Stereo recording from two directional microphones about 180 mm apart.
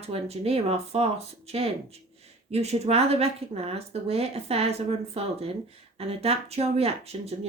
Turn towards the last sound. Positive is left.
turn(degrees=-35)  # may be behind; listen again after turning